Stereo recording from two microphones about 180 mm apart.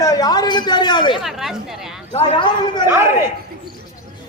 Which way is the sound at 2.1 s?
25° left (ahead or behind).